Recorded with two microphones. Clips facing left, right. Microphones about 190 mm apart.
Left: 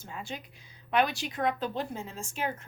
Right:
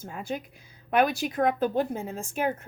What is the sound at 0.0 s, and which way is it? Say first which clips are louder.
A woman's voice: right 6 dB; 50° right (ahead or behind).